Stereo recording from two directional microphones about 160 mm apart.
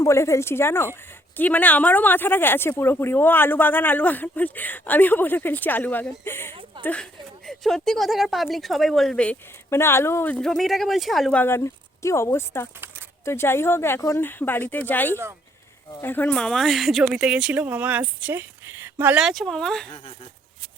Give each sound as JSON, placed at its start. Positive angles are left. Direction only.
{"t": 0.0, "sound": "speech", "side_deg": 15}
{"t": 10.4, "sound": "speech", "side_deg": 0}
{"t": 19.2, "sound": "speech", "side_deg": 0}